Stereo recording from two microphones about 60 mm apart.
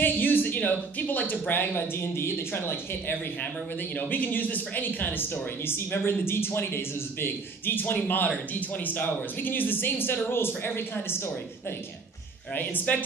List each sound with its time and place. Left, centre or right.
0.0 s a sound: left
1.5 s speech: left
3.9 s speech: left
12.5 s speech: left